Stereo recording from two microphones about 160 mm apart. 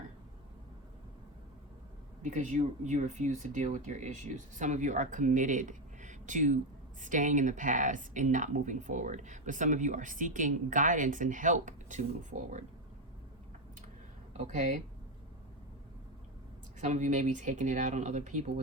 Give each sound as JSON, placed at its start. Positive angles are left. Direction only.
{"t": 2.2, "sound": "speech", "side_deg": -50}
{"t": 14.3, "sound": "speech", "side_deg": -45}
{"t": 16.8, "sound": "speech", "side_deg": -50}